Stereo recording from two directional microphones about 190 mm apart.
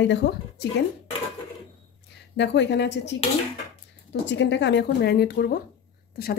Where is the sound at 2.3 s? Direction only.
70° left (ahead or behind).